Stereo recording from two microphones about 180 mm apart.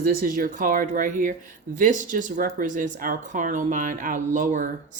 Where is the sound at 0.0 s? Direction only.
55° right (ahead or behind).